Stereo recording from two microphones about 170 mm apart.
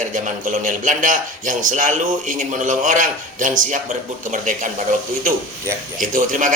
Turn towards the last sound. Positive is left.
turn(degrees=-50)  # may be behind; listen again after turning